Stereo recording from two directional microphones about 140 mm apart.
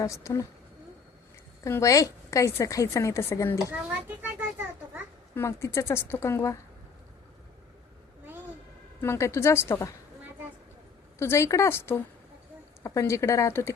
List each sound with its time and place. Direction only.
0.0 s a woman's voice: 20° left (ahead or behind)
1.6 s a woman's voice: 20° left (ahead or behind)
3.7 s children playing: 15° right (ahead or behind)
5.3 s a woman's voice: 20° left (ahead or behind)
9.0 s a woman's voice: 20° left (ahead or behind)
11.2 s a woman's voice: 20° left (ahead or behind)